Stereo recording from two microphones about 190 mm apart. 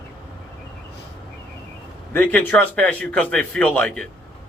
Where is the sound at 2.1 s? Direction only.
10° left (ahead or behind).